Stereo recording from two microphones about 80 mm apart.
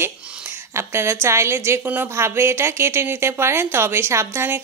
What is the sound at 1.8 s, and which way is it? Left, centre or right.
Speech, right.